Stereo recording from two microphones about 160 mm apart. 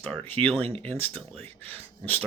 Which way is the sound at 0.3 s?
35° right (ahead or behind).